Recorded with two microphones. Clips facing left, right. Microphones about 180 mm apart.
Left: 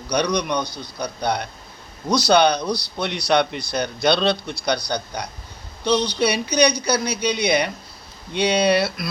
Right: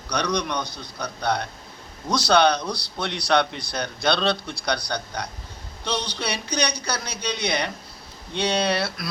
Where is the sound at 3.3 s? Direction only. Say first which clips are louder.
Left 2 dB; 5° left (ahead or behind).